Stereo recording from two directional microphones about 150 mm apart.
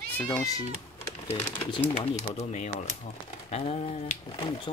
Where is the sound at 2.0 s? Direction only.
50° left (ahead or behind).